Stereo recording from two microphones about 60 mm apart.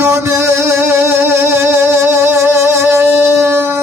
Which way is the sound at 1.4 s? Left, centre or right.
Right.